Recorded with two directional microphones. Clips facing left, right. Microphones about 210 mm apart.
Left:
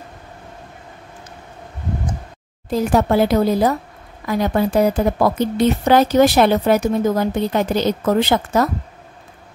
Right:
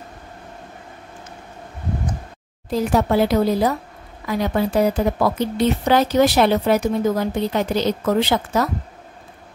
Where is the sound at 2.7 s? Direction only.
50° left (ahead or behind).